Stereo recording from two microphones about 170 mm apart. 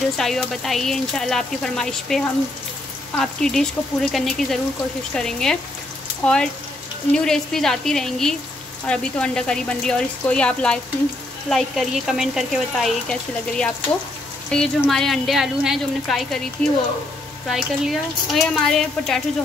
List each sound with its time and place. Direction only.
0.2 s speech: centre (ahead or behind)
17.5 s speech: centre (ahead or behind)